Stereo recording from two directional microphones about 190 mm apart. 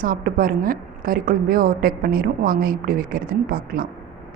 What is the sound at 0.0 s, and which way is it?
A woman's voice, 45° right (ahead or behind).